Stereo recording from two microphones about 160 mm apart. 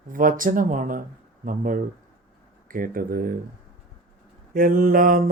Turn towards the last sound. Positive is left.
turn(degrees=-60)  # may be behind; listen again after turning